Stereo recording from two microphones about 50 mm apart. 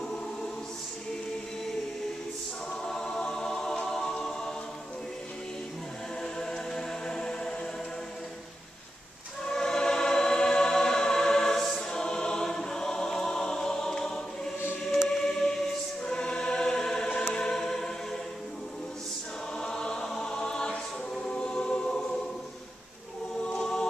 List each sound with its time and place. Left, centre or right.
2.8 s music: centre
6.2 s music: centre
9.4 s choir: centre
15.0 s music: centre
16.0 s choir: centre
17.3 s music: centre
19.6 s choir: centre
23.5 s chant: centre